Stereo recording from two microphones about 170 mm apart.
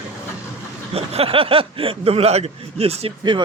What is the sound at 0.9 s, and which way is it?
Speech, 35° right (ahead or behind).